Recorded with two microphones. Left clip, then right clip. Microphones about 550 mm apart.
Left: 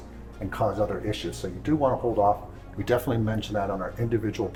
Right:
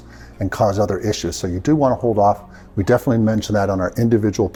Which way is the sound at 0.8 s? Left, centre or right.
Right.